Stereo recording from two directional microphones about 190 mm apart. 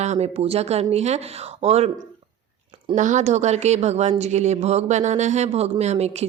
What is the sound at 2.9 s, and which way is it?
A woman's voice, 40° right (ahead or behind).